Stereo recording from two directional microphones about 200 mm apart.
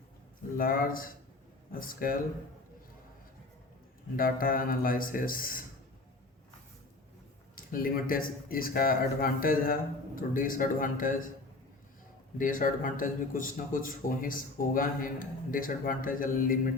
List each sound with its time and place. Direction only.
0.5 s a man's voice: 45° left (ahead or behind)
4.2 s a man's voice: 45° left (ahead or behind)
7.5 s a man's voice: 45° left (ahead or behind)
12.4 s a man's voice: 40° left (ahead or behind)